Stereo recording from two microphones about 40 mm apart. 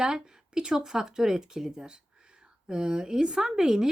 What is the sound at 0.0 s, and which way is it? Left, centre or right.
Speech, right.